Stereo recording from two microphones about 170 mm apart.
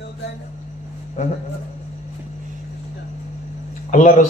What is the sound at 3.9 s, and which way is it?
Speech, 45° left (ahead or behind).